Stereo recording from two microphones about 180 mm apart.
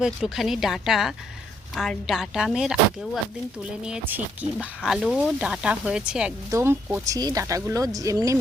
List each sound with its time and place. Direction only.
0.0 s speech: centre (ahead or behind)
3.8 s speech: 5° right (ahead or behind)